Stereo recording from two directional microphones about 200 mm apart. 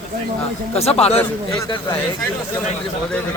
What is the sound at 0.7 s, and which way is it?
Speech, 30° left (ahead or behind).